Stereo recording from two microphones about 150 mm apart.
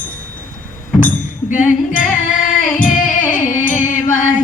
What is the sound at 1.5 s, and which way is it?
Music, 60° left (ahead or behind).